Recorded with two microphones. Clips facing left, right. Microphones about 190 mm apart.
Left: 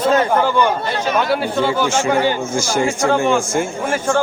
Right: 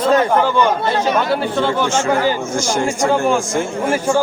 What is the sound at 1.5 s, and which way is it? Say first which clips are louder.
A man's voice: even; 5° left (ahead or behind).